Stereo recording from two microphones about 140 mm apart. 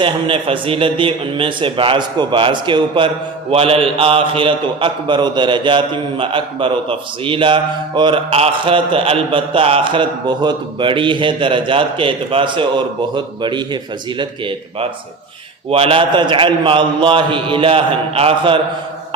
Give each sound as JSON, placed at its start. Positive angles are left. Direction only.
{"t": 0.0, "sound": "a man's voice", "side_deg": -40}